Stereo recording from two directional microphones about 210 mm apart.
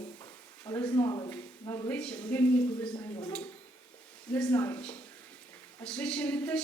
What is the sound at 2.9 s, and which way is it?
Speech, 20° left (ahead or behind).